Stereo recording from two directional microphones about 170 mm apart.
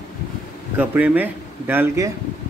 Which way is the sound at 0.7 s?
10° right (ahead or behind).